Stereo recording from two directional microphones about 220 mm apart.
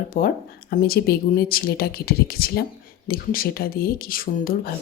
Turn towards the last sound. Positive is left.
turn(degrees=40)  # may be behind; listen again after turning